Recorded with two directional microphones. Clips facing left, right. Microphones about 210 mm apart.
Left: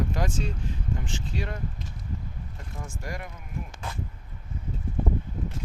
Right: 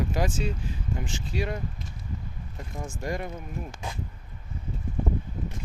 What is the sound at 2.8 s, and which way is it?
Speech, 25° right (ahead or behind).